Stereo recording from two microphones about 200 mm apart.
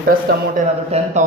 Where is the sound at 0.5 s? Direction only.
35° right (ahead or behind).